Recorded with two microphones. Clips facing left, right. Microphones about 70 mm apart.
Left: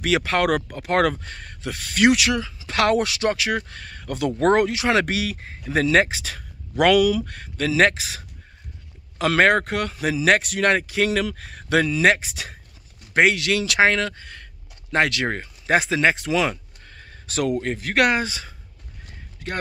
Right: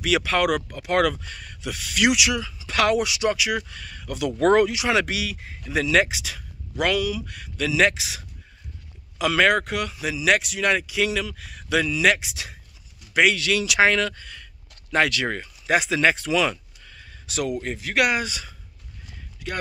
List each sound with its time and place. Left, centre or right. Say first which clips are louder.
0.0 s speech: left 1 dB; left
4.3 s speech: right 1 dB; left
6.8 s speech: left 7 dB; left
7.3 s speech: left 2 dB; left
9.2 s speech: left 2 dB; left
16.8 s speech: left 2 dB; left